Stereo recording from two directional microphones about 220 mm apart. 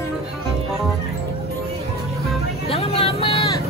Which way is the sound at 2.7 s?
25° left (ahead or behind).